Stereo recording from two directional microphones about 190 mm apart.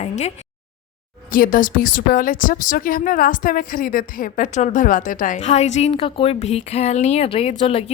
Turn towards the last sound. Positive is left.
turn(degrees=30)  # may be behind; listen again after turning